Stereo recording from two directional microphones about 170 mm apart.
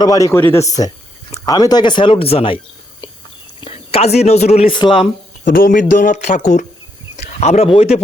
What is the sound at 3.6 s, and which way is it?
Speech, 35° left (ahead or behind).